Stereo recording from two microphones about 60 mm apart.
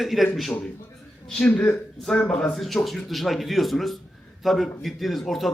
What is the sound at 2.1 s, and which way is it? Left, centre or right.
Speech, centre.